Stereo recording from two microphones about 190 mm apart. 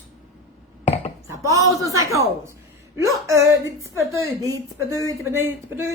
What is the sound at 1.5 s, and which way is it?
Speech, 15° left (ahead or behind).